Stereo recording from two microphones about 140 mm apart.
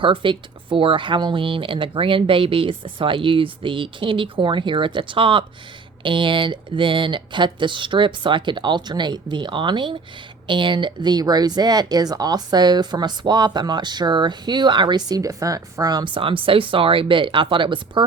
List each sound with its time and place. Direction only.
0.0 s speech: 35° right (ahead or behind)